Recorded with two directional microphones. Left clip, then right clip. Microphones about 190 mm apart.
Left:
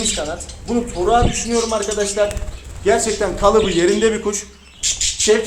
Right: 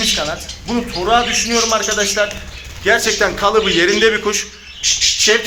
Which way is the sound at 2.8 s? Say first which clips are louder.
Right 3 dB; 5° left (ahead or behind).